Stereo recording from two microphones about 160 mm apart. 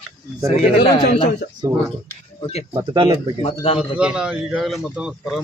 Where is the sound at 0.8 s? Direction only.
35° left (ahead or behind).